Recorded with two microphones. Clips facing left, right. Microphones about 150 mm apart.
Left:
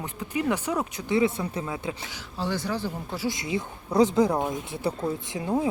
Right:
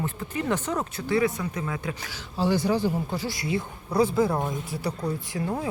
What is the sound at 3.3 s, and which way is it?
Speech, 20° left (ahead or behind).